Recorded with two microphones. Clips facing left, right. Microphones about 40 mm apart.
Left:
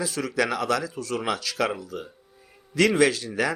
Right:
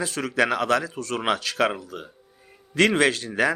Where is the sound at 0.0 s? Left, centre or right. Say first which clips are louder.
Right 2 dB; right.